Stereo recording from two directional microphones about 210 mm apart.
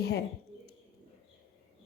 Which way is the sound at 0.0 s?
50° left (ahead or behind).